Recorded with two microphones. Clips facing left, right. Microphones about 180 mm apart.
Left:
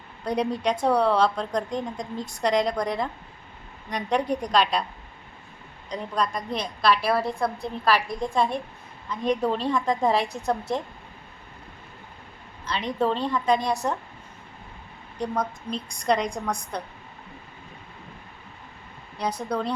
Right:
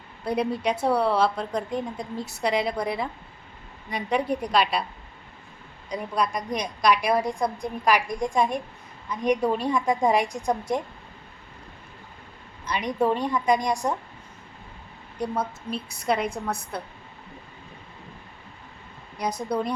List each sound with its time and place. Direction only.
0.3 s a woman's voice: 5° right (ahead or behind)
5.9 s a woman's voice: 10° right (ahead or behind)
12.6 s a woman's voice: 15° right (ahead or behind)
15.2 s a woman's voice: 5° right (ahead or behind)
19.5 s a woman's voice: 10° right (ahead or behind)